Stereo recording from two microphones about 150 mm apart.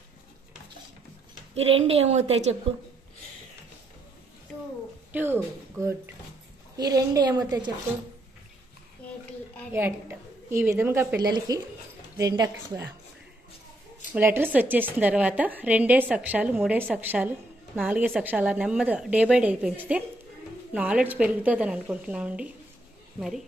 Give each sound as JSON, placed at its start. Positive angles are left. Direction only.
{"t": 1.5, "sound": "a woman's voice", "side_deg": -40}
{"t": 5.1, "sound": "a woman's voice", "side_deg": -15}
{"t": 9.8, "sound": "a woman's voice", "side_deg": -15}
{"t": 11.1, "sound": "a woman's voice", "side_deg": -25}
{"t": 14.1, "sound": "a woman's voice", "side_deg": -15}